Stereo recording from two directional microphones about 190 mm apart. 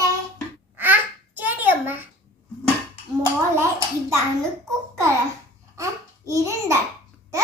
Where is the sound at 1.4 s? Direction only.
10° right (ahead or behind).